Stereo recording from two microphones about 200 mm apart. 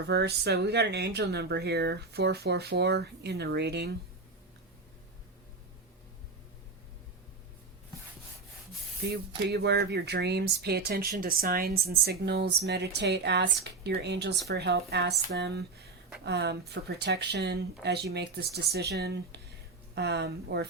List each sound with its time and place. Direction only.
0.1 s speech: 55° right (ahead or behind)
9.0 s speech: 55° right (ahead or behind)